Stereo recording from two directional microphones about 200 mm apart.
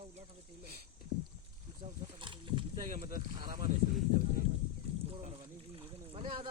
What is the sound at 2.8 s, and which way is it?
Speech, 40° right (ahead or behind).